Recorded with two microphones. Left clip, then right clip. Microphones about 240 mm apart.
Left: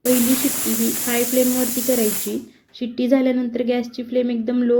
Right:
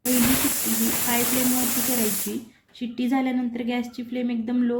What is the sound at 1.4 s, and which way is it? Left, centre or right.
Speech, centre.